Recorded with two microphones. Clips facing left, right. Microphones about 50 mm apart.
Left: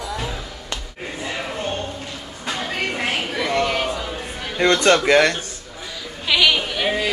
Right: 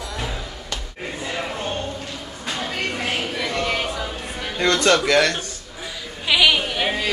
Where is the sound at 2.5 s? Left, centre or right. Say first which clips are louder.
Left 1 dB; centre.